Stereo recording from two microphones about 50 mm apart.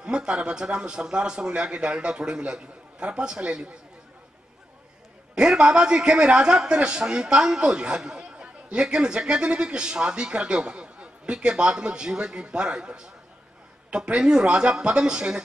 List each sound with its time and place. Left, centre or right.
0.0 s a man's voice: centre
5.3 s a man's voice: centre